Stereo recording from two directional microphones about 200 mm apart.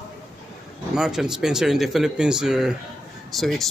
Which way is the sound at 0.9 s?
5° right (ahead or behind).